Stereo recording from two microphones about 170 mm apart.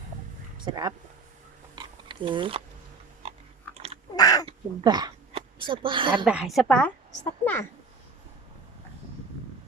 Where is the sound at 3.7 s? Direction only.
35° right (ahead or behind).